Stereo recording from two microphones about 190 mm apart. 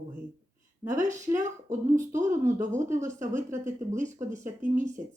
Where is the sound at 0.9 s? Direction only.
20° right (ahead or behind).